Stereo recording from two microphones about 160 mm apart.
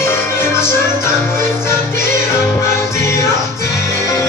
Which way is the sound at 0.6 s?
15° left (ahead or behind).